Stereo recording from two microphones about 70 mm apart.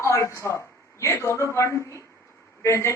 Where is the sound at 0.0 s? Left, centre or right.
Left.